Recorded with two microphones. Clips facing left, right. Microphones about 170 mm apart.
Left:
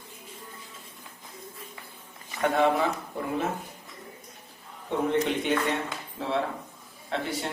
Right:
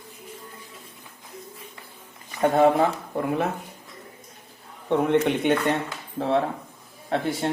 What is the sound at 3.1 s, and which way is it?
Speech, 55° right (ahead or behind).